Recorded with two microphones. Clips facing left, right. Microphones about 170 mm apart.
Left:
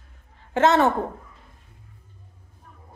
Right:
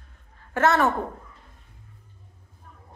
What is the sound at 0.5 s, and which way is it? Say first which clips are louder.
Speech: left 3 dB; 20° left (ahead or behind).